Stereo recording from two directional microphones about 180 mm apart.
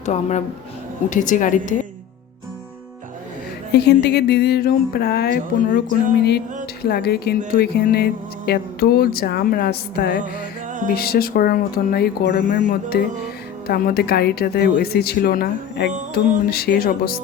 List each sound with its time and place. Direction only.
0.0 s a woman's voice: 40° left (ahead or behind)
3.7 s speech: 65° left (ahead or behind)
6.8 s speech: 60° left (ahead or behind)